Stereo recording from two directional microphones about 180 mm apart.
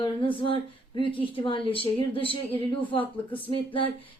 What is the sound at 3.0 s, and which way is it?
Speech, 10° left (ahead or behind).